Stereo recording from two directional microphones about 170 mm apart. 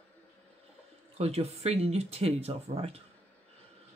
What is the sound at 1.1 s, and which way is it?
Speech, 40° right (ahead or behind).